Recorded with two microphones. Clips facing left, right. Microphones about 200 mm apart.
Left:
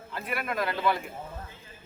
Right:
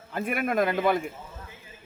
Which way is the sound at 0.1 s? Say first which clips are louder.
Right 6 dB; 50° right (ahead or behind).